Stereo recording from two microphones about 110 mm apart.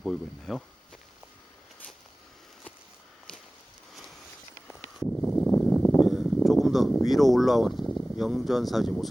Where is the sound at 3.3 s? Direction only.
10° left (ahead or behind).